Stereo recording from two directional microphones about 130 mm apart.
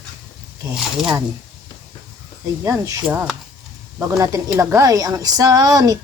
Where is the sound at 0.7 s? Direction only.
5° right (ahead or behind).